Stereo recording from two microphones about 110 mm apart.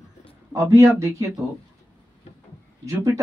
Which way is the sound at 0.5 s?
30° right (ahead or behind).